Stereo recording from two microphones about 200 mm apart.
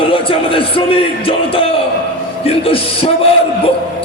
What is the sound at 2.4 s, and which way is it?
Speech, 30° left (ahead or behind).